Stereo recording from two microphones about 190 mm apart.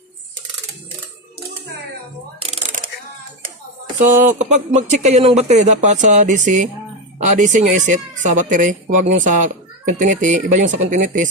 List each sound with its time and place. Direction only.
3.9 s speech: 40° right (ahead or behind)